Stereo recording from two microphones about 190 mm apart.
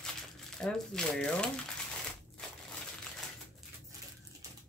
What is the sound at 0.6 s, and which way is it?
Speech, 5° left (ahead or behind).